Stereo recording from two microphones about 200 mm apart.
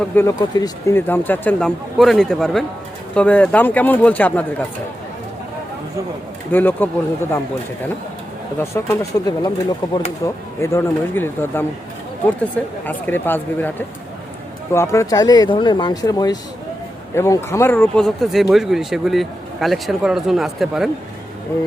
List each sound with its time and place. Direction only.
0.0 s speech: 15° left (ahead or behind)
6.5 s speech: 10° left (ahead or behind)
8.5 s speech: 15° left (ahead or behind)
12.8 s speech: 10° left (ahead or behind)